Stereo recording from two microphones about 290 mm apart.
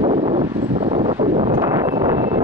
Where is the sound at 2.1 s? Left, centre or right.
Right.